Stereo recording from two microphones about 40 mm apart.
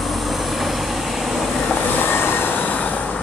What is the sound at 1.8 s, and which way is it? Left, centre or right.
Vehicle, left.